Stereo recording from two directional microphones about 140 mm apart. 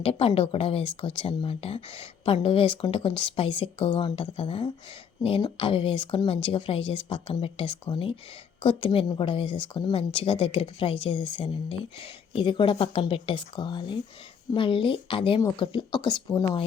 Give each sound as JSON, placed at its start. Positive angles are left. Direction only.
{"t": 0.0, "sound": "speech", "side_deg": 45}
{"t": 1.5, "sound": "a woman's voice", "side_deg": 45}